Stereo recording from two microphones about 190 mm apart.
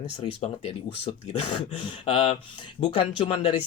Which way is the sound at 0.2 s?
30° left (ahead or behind).